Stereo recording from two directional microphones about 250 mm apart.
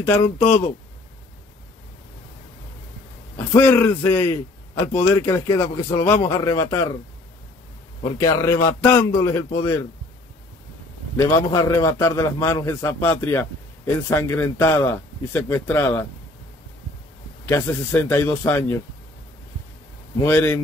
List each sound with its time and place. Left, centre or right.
0.1 s a man's voice: centre
3.3 s a man's voice: centre
8.0 s a man's voice: centre
11.1 s a man's voice: centre
17.5 s a man's voice: centre
20.2 s a man's voice: centre